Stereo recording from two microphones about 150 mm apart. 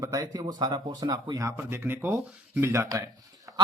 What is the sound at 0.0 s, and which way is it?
Speech, 20° right (ahead or behind).